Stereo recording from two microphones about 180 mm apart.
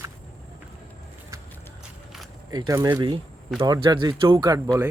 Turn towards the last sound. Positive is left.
turn(degrees=-20)  # may be behind; listen again after turning